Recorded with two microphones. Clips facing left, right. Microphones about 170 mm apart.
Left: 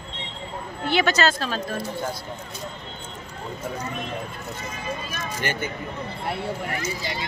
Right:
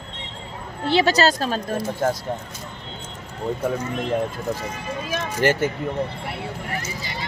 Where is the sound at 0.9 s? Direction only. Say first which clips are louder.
Right 3 dB; 35° right (ahead or behind).